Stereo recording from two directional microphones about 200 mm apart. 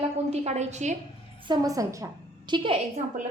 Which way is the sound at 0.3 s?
35° right (ahead or behind).